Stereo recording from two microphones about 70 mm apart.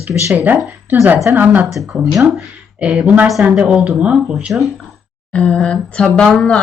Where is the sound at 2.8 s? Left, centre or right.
Centre.